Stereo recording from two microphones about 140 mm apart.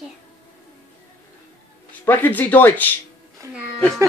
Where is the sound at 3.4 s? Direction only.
25° right (ahead or behind).